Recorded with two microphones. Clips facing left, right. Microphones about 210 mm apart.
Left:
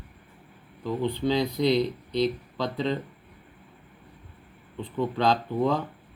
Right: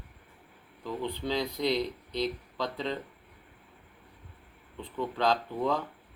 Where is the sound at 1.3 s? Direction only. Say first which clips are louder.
Left 5 dB; 75° left (ahead or behind).